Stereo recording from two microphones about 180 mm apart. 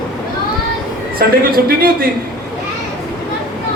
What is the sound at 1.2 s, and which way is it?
Speech, 55° right (ahead or behind).